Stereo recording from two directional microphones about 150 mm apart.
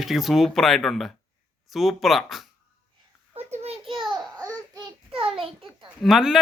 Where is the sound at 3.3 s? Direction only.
45° right (ahead or behind).